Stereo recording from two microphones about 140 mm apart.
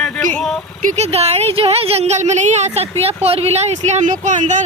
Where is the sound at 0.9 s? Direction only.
50° right (ahead or behind).